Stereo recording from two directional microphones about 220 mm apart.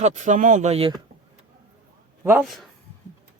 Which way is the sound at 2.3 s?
5° right (ahead or behind).